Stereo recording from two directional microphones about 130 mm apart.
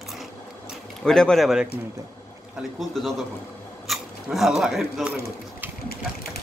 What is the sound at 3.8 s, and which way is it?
Speech, centre (ahead or behind).